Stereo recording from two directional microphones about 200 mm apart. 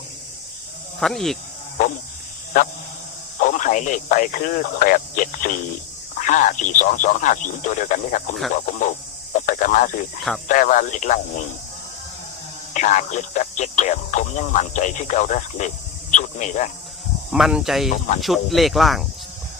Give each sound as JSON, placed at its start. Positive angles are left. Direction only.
{"t": 0.9, "sound": "speech", "side_deg": 0}
{"t": 3.4, "sound": "speech", "side_deg": 40}
{"t": 12.7, "sound": "speech", "side_deg": 35}
{"t": 16.1, "sound": "a sound", "side_deg": 35}
{"t": 17.3, "sound": "speech", "side_deg": 0}